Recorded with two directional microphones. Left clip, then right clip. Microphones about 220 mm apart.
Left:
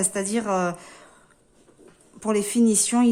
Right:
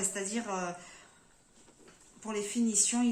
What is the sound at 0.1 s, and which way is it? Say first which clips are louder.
Speech: left 11 dB; 50° left (ahead or behind).